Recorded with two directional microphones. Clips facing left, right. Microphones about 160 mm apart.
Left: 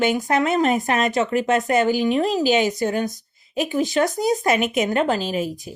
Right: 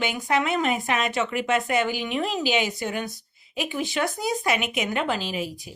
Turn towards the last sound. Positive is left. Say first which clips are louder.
# left 6 dB
turn(degrees=45)  # may be behind; listen again after turning